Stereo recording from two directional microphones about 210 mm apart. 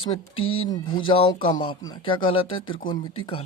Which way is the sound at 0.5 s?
25° left (ahead or behind).